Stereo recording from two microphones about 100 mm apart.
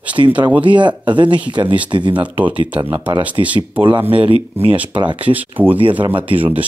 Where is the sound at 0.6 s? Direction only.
50° right (ahead or behind).